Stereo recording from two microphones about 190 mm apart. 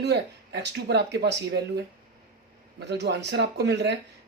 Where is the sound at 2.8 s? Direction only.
60° right (ahead or behind).